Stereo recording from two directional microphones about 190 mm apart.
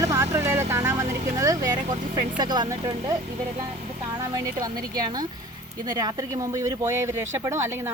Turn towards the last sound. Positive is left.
turn(degrees=-15)  # may be behind; listen again after turning